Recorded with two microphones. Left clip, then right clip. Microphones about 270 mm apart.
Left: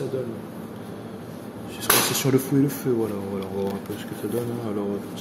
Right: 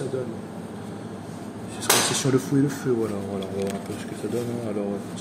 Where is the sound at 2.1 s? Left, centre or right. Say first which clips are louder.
Left 1 dB; centre.